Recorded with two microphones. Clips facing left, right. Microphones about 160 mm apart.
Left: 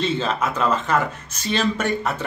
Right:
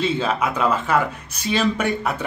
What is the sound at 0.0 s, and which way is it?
Speech, 10° right (ahead or behind).